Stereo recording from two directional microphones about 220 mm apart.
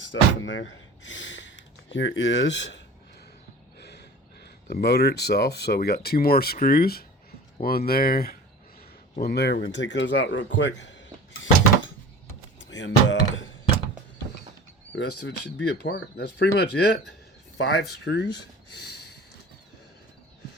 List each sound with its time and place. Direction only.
0.1 s speech: 55° left (ahead or behind)
3.8 s a sound: 50° left (ahead or behind)
4.7 s speech: 45° left (ahead or behind)
12.5 s door: 55° left (ahead or behind)
15.6 s speech: 50° left (ahead or behind)